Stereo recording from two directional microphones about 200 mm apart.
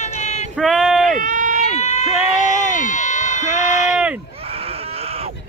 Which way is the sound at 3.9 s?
5° right (ahead or behind).